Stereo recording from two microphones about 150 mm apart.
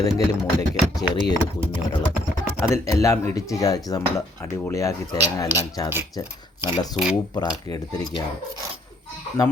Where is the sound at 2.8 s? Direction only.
20° left (ahead or behind).